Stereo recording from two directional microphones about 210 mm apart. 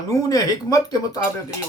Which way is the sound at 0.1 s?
15° left (ahead or behind).